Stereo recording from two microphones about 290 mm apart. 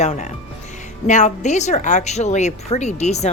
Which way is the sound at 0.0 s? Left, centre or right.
Left.